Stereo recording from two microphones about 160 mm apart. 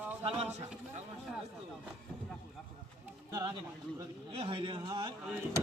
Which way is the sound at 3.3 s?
25° right (ahead or behind).